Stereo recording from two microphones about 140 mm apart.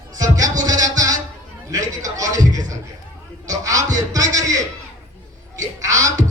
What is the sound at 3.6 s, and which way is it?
Music, 25° right (ahead or behind).